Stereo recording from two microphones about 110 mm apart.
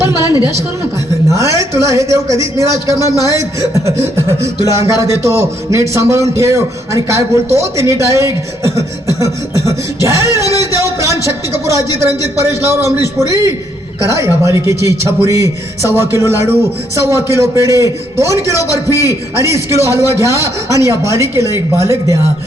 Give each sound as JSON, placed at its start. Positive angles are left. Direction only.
{"t": 0.0, "sound": "a woman's voice", "side_deg": -30}
{"t": 4.6, "sound": "a man's voice", "side_deg": -25}
{"t": 10.3, "sound": "a sound", "side_deg": -25}
{"t": 11.3, "sound": "a man's voice", "side_deg": -25}